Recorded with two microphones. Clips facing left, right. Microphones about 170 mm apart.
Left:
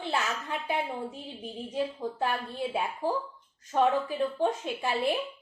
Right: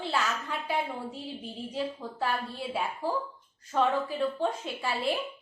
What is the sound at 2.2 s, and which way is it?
A woman's voice, 20° left (ahead or behind).